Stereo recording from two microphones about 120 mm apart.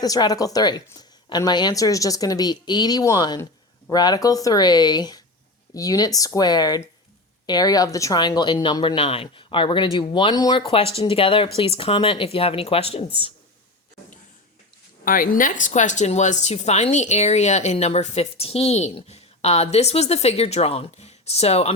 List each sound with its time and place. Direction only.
0.0 s a woman's voice: 30° left (ahead or behind)
8.8 s speech: 50° left (ahead or behind)
15.4 s speech: 90° left; by 21.7 s 60° left (ahead or behind)